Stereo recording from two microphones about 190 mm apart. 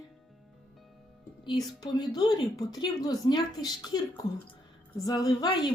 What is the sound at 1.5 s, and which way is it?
Speech, 20° left (ahead or behind).